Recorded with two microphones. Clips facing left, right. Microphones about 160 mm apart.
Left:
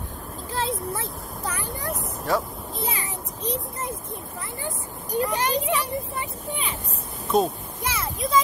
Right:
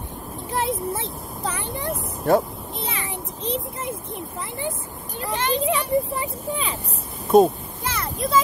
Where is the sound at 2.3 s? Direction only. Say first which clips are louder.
Right 6 dB; 50° right (ahead or behind).